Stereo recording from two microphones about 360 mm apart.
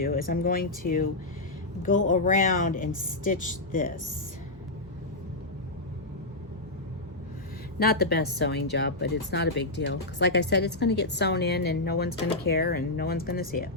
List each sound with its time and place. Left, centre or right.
0.0 s a woman's voice: left
2.0 s a woman's voice: left
7.8 s a woman's voice: left